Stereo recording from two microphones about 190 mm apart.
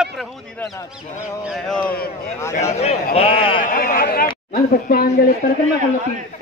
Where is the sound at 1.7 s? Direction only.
5° left (ahead or behind).